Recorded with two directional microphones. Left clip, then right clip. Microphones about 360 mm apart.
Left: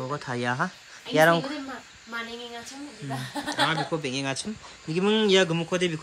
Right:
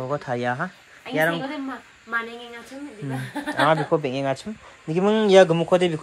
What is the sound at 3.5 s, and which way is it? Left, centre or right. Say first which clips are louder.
A man's voice: right 6 dB; centre.